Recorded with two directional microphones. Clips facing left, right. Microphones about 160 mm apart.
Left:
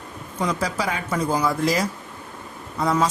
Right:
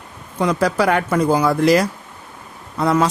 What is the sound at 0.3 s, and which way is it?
Speech, 65° right (ahead or behind).